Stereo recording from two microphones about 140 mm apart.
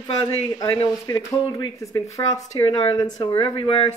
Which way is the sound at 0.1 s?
25° left (ahead or behind).